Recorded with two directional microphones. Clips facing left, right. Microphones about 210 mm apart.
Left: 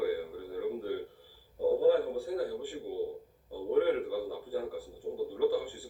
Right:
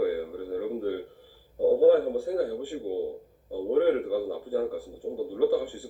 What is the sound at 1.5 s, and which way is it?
A man's voice, 45° right (ahead or behind).